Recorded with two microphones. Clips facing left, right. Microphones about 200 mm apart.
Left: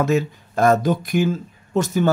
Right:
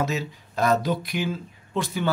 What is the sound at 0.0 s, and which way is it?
Speech, 50° left (ahead or behind).